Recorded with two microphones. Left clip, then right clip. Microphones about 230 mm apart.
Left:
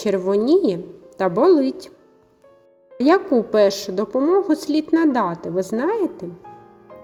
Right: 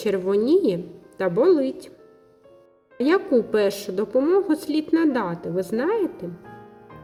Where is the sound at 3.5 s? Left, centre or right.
Centre.